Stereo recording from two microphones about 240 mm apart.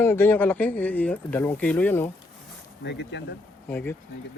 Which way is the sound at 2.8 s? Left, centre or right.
Left.